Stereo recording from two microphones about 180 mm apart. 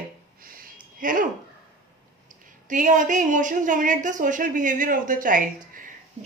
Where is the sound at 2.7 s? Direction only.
45° right (ahead or behind).